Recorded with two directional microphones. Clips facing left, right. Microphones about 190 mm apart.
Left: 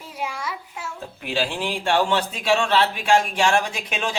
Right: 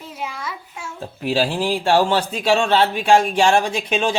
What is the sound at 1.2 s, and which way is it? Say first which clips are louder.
A man's voice: right 6 dB; 40° right (ahead or behind).